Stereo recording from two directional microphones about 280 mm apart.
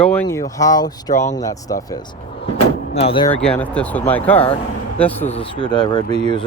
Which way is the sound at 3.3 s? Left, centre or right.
Centre.